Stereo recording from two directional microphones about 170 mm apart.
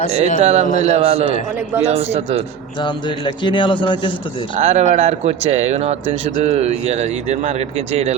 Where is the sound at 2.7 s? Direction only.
30° left (ahead or behind).